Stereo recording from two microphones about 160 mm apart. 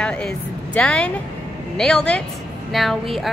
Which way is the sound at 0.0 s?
5° left (ahead or behind).